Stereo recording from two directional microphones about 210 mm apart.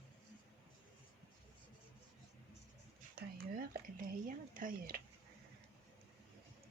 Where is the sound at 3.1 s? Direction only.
45° right (ahead or behind).